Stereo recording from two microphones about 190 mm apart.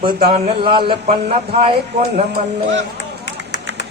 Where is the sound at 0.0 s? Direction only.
25° right (ahead or behind).